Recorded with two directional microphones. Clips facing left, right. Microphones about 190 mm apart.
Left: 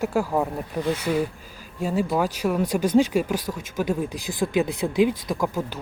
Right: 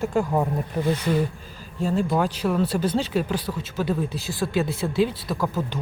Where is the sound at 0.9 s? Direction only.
10° left (ahead or behind).